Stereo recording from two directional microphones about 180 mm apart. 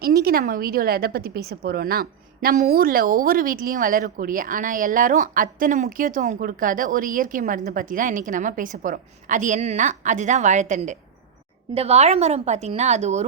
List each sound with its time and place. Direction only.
0.0 s a woman's voice: 60° right (ahead or behind); by 13.2 s 40° right (ahead or behind)